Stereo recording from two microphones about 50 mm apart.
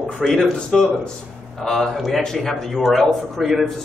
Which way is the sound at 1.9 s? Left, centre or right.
Centre.